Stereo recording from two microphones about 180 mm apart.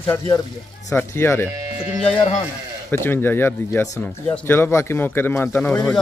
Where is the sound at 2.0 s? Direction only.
30° left (ahead or behind).